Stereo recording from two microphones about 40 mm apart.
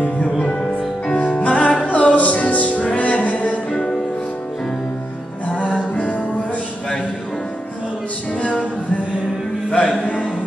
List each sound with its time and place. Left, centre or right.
1.0 s music: left
9.7 s music: centre